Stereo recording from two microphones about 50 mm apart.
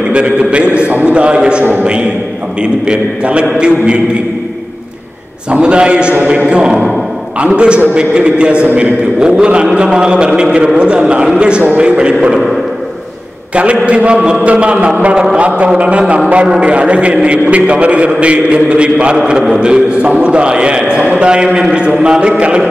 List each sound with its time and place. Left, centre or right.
0.1 s a man's voice: right
1.6 s a man's voice: right
2.6 s a man's voice: right
5.5 s a man's voice: right
13.8 s a man's voice: right
21.0 s a man's voice: right
21.3 s a man's voice: centre